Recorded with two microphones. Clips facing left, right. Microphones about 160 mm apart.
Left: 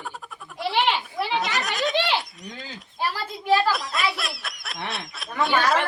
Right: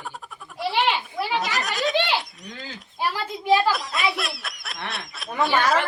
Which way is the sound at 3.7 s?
Centre (ahead or behind).